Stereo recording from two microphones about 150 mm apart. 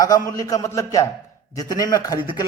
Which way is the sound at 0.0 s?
25° left (ahead or behind).